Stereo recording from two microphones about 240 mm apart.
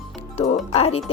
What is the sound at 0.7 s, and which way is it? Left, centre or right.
Speech, left.